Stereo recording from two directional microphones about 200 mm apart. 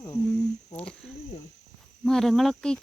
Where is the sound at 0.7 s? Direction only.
5° left (ahead or behind).